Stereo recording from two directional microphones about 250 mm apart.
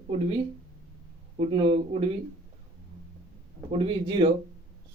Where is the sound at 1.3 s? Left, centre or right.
Right.